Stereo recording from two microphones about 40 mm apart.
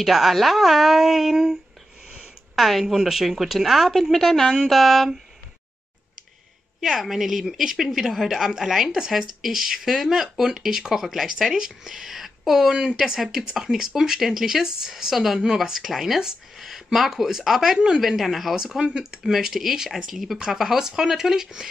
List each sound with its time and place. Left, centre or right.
0.0 s a woman's voice: centre
2.0 s a sound: right
2.5 s a woman's voice: centre
6.8 s a woman's voice: centre